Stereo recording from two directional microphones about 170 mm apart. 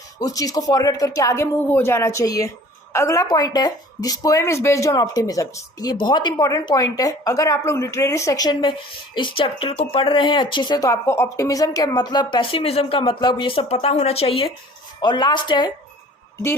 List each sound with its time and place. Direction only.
0.2 s speech: 20° left (ahead or behind)